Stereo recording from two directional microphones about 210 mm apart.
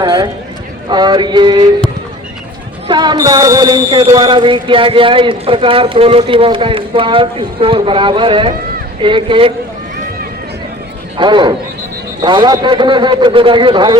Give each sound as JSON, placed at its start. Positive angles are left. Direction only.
{"t": 0.0, "sound": "clip-clop", "side_deg": -20}
{"t": 0.9, "sound": "speech", "side_deg": -20}
{"t": 2.8, "sound": "speech", "side_deg": -20}
{"t": 11.2, "sound": "speech", "side_deg": -20}